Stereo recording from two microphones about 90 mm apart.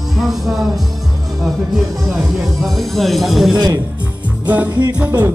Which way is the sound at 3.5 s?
50° right (ahead or behind).